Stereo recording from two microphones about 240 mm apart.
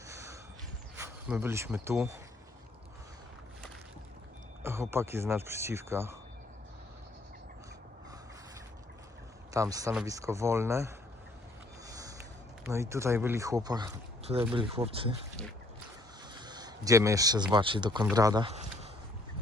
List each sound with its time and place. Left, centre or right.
0.1 s a sound: centre
0.9 s speech: centre
4.6 s speech: centre
9.5 s speech: centre
11.9 s snort: centre
12.6 s speech: centre
16.3 s a sound: centre
17.5 s speech: centre